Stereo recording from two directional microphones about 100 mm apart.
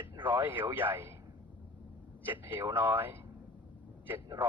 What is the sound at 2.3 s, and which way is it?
Speech, 20° right (ahead or behind).